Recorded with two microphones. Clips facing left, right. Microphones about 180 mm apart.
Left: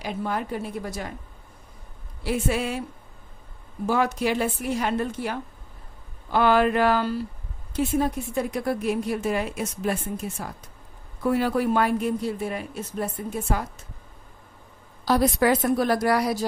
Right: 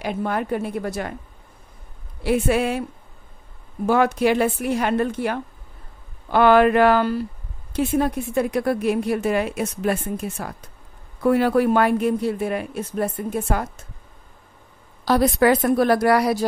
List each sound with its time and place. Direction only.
0.0 s a woman's voice: 60° right (ahead or behind)
2.2 s a woman's voice: 60° right (ahead or behind)
3.8 s a woman's voice: 65° right (ahead or behind)
15.0 s a woman's voice: 65° right (ahead or behind)